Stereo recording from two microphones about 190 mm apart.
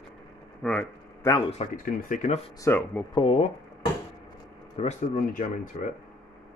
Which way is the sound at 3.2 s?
30° left (ahead or behind).